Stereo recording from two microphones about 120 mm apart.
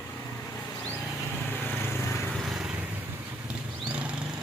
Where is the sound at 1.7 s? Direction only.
20° left (ahead or behind).